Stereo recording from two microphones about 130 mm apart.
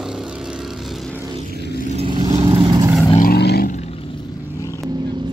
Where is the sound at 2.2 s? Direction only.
25° right (ahead or behind).